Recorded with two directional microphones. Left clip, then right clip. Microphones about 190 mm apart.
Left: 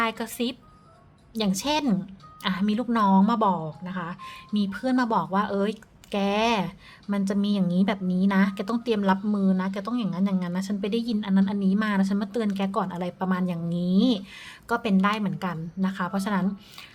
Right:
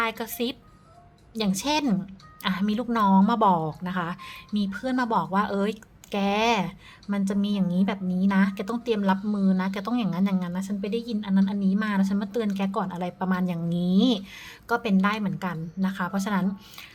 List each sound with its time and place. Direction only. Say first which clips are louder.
0.0 s speech: even; centre (ahead or behind)
3.5 s speech: right 5 dB; 20° right (ahead or behind)
4.5 s speech: left 2 dB; 5° left (ahead or behind)